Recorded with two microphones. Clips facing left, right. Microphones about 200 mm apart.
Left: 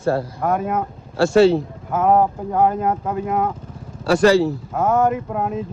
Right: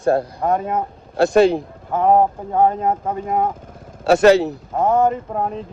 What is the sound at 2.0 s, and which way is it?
Speech, 30° right (ahead or behind).